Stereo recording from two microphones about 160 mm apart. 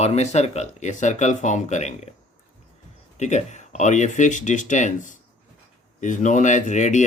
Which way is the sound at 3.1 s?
45° left (ahead or behind).